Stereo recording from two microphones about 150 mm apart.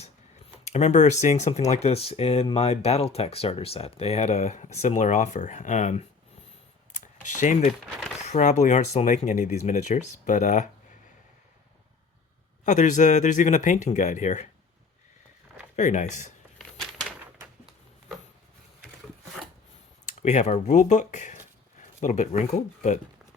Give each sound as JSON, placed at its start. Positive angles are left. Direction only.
{"t": 0.6, "sound": "speech", "side_deg": 50}
{"t": 6.9, "sound": "computer keyboard", "side_deg": 55}
{"t": 8.2, "sound": "speech", "side_deg": 50}
{"t": 12.6, "sound": "speech", "side_deg": 55}
{"t": 15.7, "sound": "speech", "side_deg": 50}
{"t": 16.6, "sound": "a sound", "side_deg": 0}
{"t": 20.1, "sound": "speech", "side_deg": 55}